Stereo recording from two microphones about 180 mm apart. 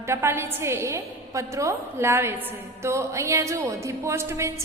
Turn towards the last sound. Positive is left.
turn(degrees=-15)  # may be behind; listen again after turning